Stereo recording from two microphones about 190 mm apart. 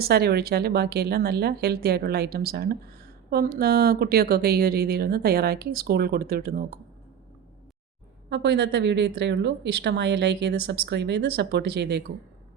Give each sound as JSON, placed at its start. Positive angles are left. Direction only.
{"t": 0.0, "sound": "a woman's voice", "side_deg": -55}
{"t": 8.3, "sound": "a woman's voice", "side_deg": -65}